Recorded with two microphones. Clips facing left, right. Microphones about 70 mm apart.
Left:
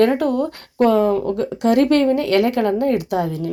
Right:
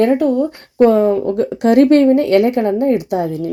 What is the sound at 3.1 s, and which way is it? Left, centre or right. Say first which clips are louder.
Speech: right 3 dB; left.